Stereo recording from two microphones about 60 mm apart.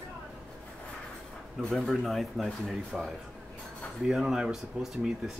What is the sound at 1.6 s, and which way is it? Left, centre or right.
Speech, centre.